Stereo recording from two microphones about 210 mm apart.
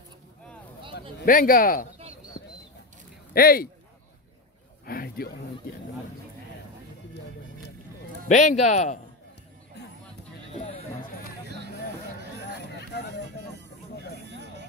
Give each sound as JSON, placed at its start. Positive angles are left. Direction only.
{"t": 1.2, "sound": "a man's voice", "side_deg": 40}
{"t": 3.3, "sound": "speech", "side_deg": 45}
{"t": 4.8, "sound": "a sound", "side_deg": 45}
{"t": 8.3, "sound": "a man's voice", "side_deg": 35}
{"t": 10.5, "sound": "music", "side_deg": 30}
{"t": 12.9, "sound": "a sound", "side_deg": 55}
{"t": 14.3, "sound": "music", "side_deg": -55}